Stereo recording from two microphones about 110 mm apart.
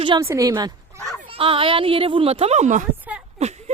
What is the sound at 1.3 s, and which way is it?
Speech, 55° right (ahead or behind).